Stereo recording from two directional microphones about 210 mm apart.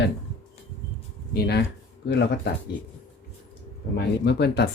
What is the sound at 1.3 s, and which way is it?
Speech, 50° left (ahead or behind).